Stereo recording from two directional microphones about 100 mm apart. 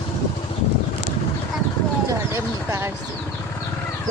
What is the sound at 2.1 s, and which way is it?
Speech, 30° right (ahead or behind).